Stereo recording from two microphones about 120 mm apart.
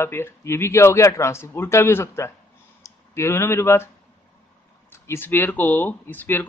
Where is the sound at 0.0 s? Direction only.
20° left (ahead or behind).